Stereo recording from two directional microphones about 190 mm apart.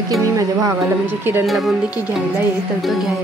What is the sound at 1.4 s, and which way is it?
Speech, centre (ahead or behind).